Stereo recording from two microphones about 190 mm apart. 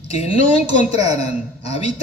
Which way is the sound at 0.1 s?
35° left (ahead or behind).